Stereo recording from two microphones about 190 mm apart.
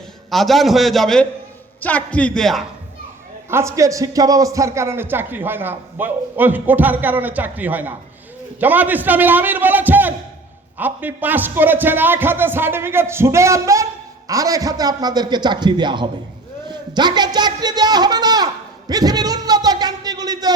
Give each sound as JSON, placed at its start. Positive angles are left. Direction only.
{"t": 0.3, "sound": "a man's voice", "side_deg": 0}
{"t": 3.5, "sound": "a man's voice", "side_deg": -15}
{"t": 16.6, "sound": "a sound", "side_deg": -20}